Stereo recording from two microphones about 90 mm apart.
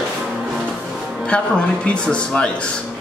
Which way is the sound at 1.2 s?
10° left (ahead or behind).